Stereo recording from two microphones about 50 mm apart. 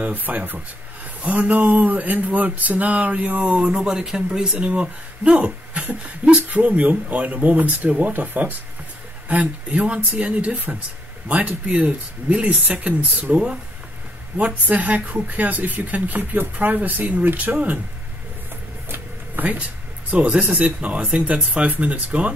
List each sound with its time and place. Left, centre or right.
0.0 s speech: right
18.9 s a sound: right
20.1 s speech: right